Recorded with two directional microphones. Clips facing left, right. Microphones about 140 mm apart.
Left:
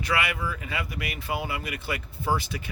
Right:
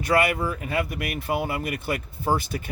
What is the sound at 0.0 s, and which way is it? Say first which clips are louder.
Speech: right 6 dB; 45° right (ahead or behind).